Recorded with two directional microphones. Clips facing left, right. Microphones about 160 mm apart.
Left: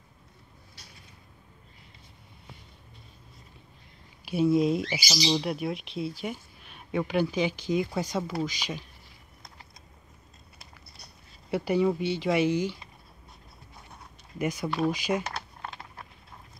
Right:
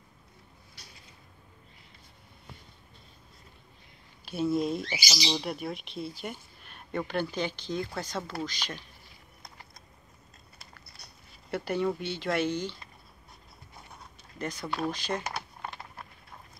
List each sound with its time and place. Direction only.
4.2 s speech: 5° left (ahead or behind)
11.5 s speech: 5° left (ahead or behind)
14.4 s speech: 10° left (ahead or behind)
15.2 s typing: 5° right (ahead or behind)